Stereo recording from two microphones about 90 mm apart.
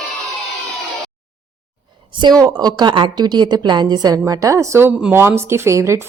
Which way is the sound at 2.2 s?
50° right (ahead or behind).